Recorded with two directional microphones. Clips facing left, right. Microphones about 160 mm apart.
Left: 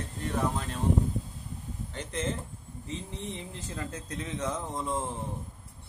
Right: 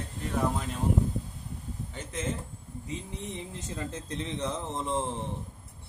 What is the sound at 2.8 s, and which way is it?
Speech, 15° right (ahead or behind).